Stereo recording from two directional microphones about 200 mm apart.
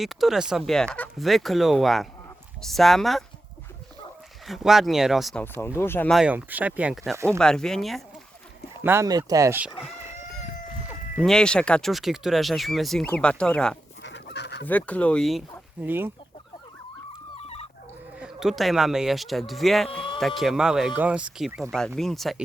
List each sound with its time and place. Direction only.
0.0 s speech: centre (ahead or behind)
4.4 s speech: centre (ahead or behind)
8.8 s speech: 10° right (ahead or behind)
11.2 s speech: 5° left (ahead or behind)
14.0 s fowl: 60° left (ahead or behind)
14.7 s speech: 5° left (ahead or behind); by 16.1 s 10° right (ahead or behind)
17.3 s dog: 30° left (ahead or behind)
18.2 s speech: centre (ahead or behind)
19.9 s speech: 25° left (ahead or behind)
20.1 s speech: centre (ahead or behind)